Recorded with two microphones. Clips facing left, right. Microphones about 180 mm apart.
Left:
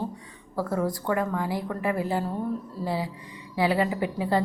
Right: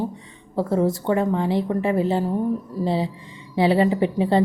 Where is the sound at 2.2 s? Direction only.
15° right (ahead or behind).